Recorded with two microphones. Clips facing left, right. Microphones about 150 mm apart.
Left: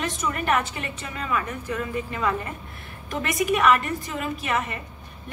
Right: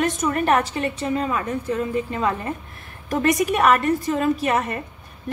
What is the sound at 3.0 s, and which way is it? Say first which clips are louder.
A woman's voice: right 5 dB; 40° right (ahead or behind).